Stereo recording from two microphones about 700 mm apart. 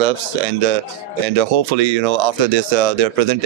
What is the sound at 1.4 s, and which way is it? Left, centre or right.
Speech, right.